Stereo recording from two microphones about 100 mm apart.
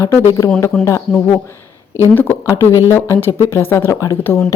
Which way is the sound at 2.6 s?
25° right (ahead or behind).